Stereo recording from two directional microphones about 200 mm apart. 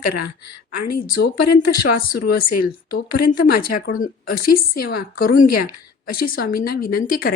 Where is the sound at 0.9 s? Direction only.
45° left (ahead or behind).